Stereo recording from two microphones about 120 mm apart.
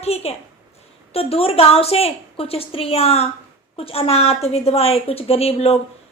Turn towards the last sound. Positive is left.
turn(degrees=55)  # may be behind; listen again after turning